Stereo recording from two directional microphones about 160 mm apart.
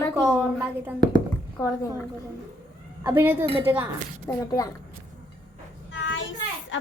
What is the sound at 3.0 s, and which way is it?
Speech, 15° right (ahead or behind).